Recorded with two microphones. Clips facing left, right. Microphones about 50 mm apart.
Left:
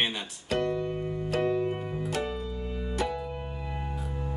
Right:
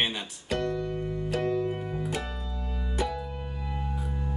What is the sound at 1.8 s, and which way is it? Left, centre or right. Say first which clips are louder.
Keyboard: right 1 dB; centre.